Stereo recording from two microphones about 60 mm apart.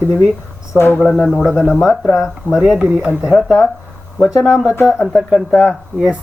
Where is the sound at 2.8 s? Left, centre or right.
Right.